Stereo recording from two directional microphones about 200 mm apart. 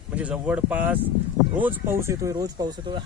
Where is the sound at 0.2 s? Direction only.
5° right (ahead or behind).